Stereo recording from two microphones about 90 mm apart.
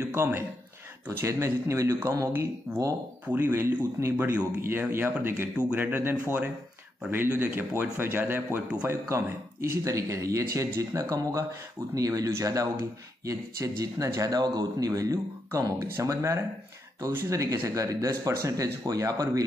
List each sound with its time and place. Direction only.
0.1 s a man's voice: 25° right (ahead or behind)